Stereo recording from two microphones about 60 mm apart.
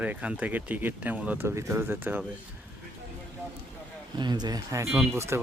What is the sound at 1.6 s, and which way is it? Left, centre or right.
Speech, right.